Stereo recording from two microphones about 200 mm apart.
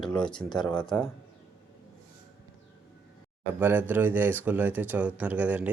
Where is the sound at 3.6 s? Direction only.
10° right (ahead or behind).